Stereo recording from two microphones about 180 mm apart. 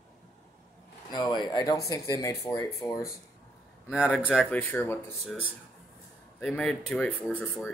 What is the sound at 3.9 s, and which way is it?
Speech, 5° right (ahead or behind).